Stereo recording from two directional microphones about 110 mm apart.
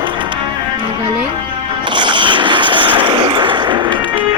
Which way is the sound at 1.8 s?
45° right (ahead or behind).